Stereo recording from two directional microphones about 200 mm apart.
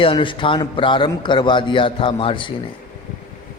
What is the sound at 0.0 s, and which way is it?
A man's voice, 25° left (ahead or behind).